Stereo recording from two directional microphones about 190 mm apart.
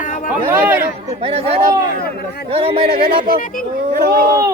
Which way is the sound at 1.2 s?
35° right (ahead or behind).